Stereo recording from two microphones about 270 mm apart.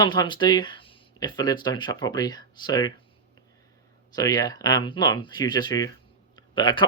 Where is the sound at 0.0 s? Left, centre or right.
Centre.